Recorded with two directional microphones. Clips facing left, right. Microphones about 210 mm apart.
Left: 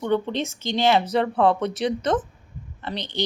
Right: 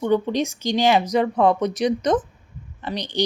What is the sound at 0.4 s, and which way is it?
Speech, 20° left (ahead or behind).